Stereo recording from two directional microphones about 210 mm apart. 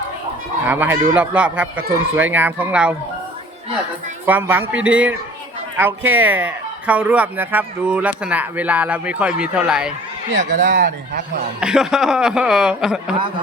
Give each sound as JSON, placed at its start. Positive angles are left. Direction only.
{"t": 0.7, "sound": "speech", "side_deg": -10}
{"t": 4.3, "sound": "speech", "side_deg": -10}
{"t": 10.3, "sound": "speech", "side_deg": -55}
{"t": 11.6, "sound": "speech", "side_deg": -5}